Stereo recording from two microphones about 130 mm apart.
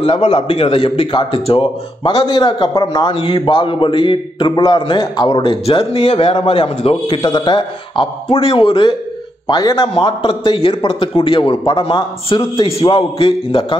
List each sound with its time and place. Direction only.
0.0 s a man's voice: 50° left (ahead or behind)